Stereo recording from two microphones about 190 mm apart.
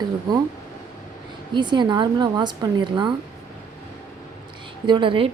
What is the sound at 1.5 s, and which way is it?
A woman's voice, 25° right (ahead or behind).